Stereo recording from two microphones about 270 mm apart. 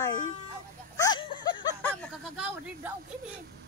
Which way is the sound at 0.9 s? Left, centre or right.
Centre.